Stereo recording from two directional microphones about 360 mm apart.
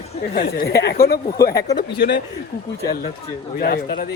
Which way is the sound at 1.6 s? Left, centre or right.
Centre.